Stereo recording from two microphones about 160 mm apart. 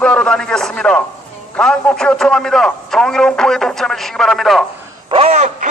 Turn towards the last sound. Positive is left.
turn(degrees=-40)  # may be behind; listen again after turning